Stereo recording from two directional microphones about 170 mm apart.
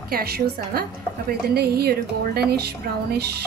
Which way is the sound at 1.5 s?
65° right (ahead or behind).